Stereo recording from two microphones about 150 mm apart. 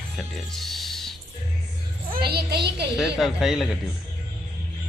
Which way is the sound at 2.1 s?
90° right.